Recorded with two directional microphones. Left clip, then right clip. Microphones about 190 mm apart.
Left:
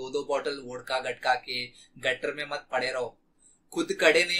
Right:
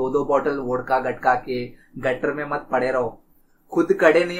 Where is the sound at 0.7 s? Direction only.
15° left (ahead or behind).